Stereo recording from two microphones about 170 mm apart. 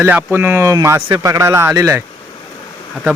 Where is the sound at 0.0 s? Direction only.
15° right (ahead or behind).